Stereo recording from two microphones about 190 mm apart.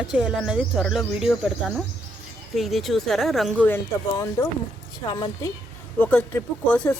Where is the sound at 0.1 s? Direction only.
5° right (ahead or behind).